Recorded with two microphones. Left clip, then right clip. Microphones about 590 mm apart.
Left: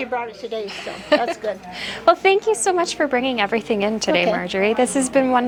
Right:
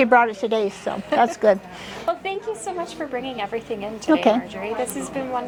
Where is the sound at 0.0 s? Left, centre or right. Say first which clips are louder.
Right 9 dB; right.